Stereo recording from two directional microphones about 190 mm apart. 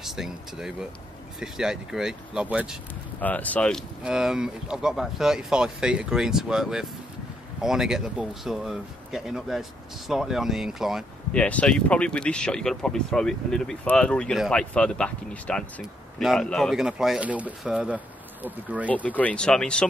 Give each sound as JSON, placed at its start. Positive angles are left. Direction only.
{"t": 0.0, "sound": "speech", "side_deg": 0}
{"t": 3.2, "sound": "speech", "side_deg": 10}
{"t": 19.0, "sound": "speech", "side_deg": 5}